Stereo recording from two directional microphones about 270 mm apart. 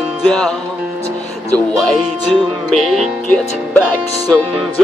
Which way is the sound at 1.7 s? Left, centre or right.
Centre.